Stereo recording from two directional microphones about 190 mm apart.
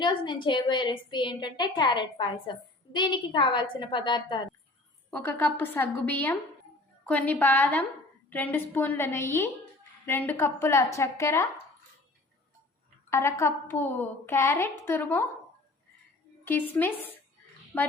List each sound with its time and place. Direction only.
0.0 s a woman's voice: 25° left (ahead or behind)
5.1 s a woman's voice: 10° left (ahead or behind)
13.1 s a woman's voice: 15° left (ahead or behind)
16.4 s a woman's voice: 10° left (ahead or behind)